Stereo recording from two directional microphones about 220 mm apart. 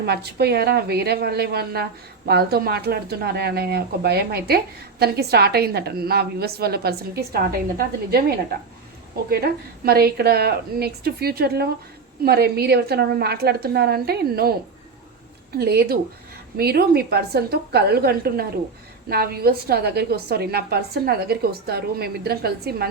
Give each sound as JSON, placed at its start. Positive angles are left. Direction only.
{"t": 0.0, "sound": "speech", "side_deg": -45}
{"t": 9.3, "sound": "speech", "side_deg": -45}
{"t": 15.5, "sound": "speech", "side_deg": -45}